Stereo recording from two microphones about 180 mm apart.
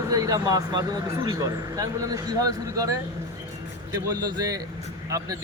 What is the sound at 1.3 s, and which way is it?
A man's voice, 20° right (ahead or behind).